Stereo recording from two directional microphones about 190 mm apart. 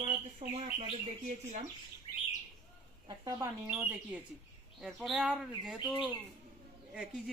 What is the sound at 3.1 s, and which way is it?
Speech, 20° right (ahead or behind).